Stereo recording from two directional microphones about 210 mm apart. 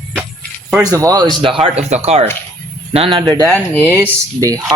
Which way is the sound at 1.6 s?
30° right (ahead or behind).